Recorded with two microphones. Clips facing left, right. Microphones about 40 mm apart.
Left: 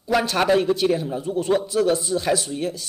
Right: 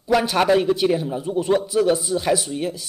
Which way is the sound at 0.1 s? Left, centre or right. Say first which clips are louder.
Right 2 dB; centre.